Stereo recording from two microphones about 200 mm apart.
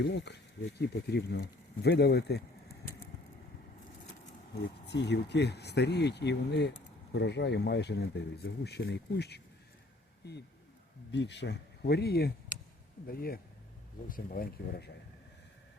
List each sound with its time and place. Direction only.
0.0 s speech: 55° left (ahead or behind)
4.9 s speech: 60° left (ahead or behind)